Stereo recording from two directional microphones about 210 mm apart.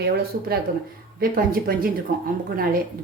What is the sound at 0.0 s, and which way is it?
Speech, 50° right (ahead or behind).